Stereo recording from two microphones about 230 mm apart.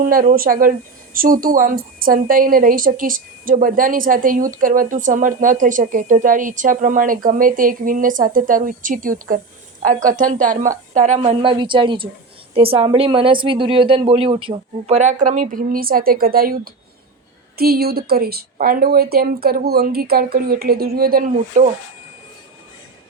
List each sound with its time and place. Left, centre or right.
0.0 s a woman's voice: right